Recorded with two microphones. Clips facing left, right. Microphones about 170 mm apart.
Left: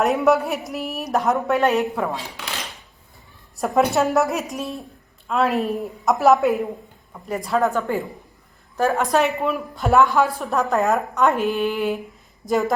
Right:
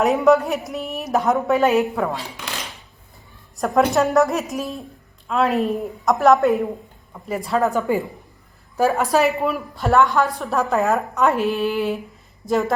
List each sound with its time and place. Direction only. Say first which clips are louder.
0.0 s speech: right 2 dB; centre (ahead or behind)
3.6 s speech: right 1 dB; centre (ahead or behind)
8.8 s speech: right 2 dB; 5° right (ahead or behind)